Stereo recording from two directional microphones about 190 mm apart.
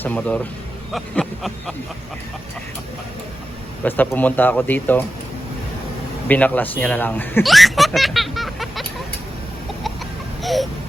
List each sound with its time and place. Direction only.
0.0 s speech: 5° left (ahead or behind)
3.8 s speech: 10° left (ahead or behind)
6.2 s speech: 10° left (ahead or behind)
10.4 s baby cry: centre (ahead or behind)